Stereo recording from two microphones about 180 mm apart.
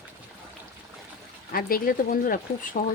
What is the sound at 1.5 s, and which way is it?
Speech, 55° left (ahead or behind).